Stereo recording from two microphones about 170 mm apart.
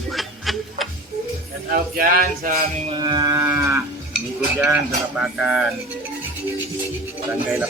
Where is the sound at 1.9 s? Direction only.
55° right (ahead or behind).